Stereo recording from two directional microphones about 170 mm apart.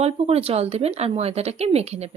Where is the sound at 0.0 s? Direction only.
35° right (ahead or behind).